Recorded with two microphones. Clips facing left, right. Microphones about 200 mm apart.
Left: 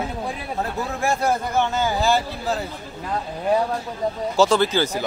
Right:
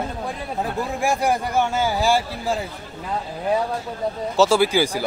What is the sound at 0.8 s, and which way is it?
A man's voice, 15° right (ahead or behind).